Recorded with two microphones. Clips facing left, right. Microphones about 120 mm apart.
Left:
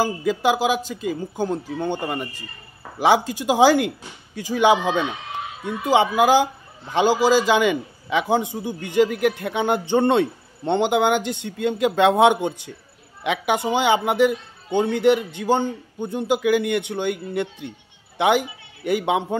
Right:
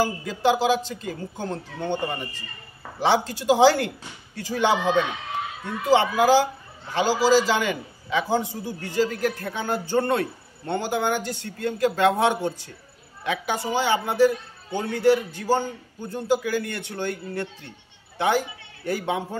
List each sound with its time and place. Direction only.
0.3 s a man's voice: 10° left (ahead or behind)
3.0 s a man's voice: 10° left (ahead or behind)